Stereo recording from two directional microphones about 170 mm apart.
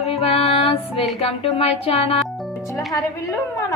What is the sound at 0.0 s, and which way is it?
Music, 35° left (ahead or behind).